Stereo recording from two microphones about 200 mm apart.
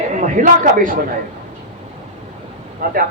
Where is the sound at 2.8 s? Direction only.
45° right (ahead or behind).